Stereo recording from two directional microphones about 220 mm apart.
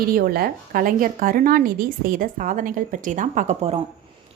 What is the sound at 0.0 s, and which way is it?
A woman's voice, 40° right (ahead or behind).